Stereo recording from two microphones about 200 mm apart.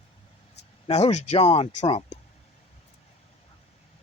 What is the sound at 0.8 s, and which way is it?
Speech, 35° left (ahead or behind).